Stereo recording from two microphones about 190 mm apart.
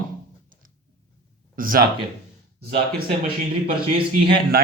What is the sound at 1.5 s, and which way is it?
Speech, 50° right (ahead or behind).